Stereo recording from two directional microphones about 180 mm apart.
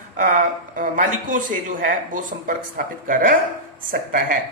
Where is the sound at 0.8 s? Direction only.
50° right (ahead or behind).